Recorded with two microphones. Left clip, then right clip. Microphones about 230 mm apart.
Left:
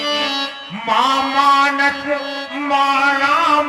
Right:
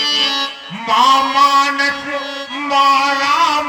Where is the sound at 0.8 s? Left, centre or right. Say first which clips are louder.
Right 4 dB; right.